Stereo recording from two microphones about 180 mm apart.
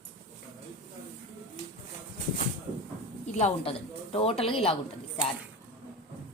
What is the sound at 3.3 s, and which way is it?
A woman's voice, 35° left (ahead or behind).